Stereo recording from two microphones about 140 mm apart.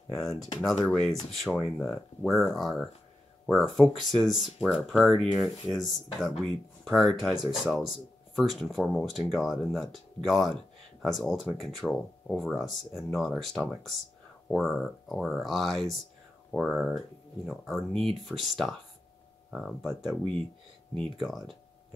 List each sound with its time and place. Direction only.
0.1 s speech: 5° left (ahead or behind)